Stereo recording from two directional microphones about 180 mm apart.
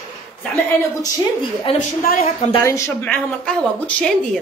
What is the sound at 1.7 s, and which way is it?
Speech, 30° left (ahead or behind).